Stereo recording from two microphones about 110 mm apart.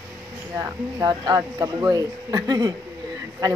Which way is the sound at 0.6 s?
35° right (ahead or behind).